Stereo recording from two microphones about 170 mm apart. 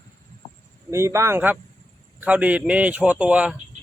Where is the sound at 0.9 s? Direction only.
15° right (ahead or behind).